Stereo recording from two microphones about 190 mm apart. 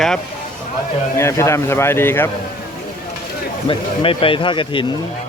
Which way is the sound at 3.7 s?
30° left (ahead or behind).